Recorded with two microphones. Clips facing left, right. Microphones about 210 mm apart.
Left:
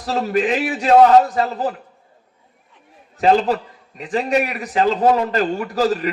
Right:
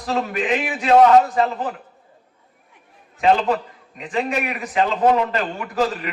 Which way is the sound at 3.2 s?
35° left (ahead or behind).